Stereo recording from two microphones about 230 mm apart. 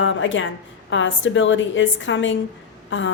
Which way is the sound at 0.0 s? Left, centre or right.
Left.